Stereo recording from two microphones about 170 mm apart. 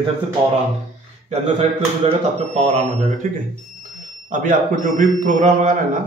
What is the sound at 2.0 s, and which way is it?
Speech, 40° right (ahead or behind).